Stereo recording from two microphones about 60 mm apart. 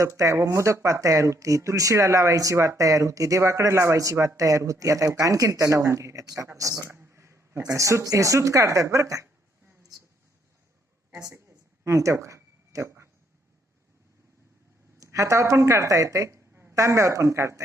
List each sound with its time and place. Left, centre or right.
0.0 s speech: right
0.5 s speech: right
4.2 s speech: right
7.1 s a sound: right
7.6 s speech: right
11.9 s a sound: right
14.9 s speech: right
16.5 s a sound: right
16.7 s speech: right